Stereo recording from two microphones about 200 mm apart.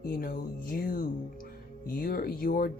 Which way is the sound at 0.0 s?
45° left (ahead or behind).